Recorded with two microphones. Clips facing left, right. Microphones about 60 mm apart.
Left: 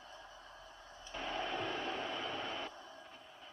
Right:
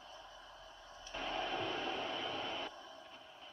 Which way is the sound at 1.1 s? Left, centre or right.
Centre.